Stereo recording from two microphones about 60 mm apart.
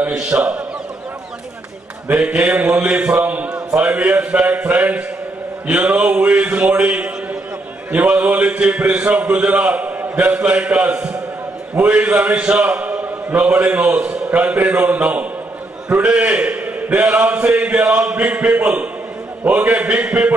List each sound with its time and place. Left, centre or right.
0.2 s a man's voice: right
2.2 s a man's voice: right
5.7 s a sound: centre
5.9 s a man's voice: right